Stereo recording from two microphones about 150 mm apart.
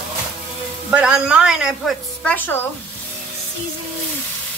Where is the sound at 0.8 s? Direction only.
10° right (ahead or behind).